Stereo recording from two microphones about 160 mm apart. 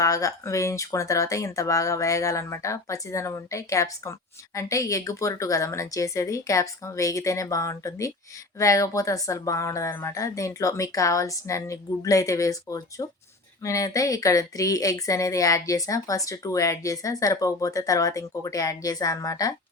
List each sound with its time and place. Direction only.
0.0 s a woman's voice: 20° left (ahead or behind)